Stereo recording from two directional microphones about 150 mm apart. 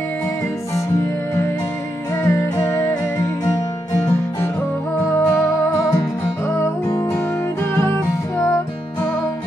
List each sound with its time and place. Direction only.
2.2 s music: 20° left (ahead or behind)
5.0 s music: 20° left (ahead or behind)